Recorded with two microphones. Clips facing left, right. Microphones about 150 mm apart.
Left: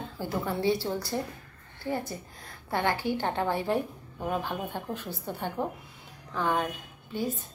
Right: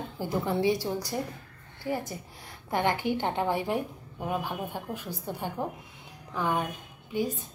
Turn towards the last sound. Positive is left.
turn(degrees=-15)  # may be behind; listen again after turning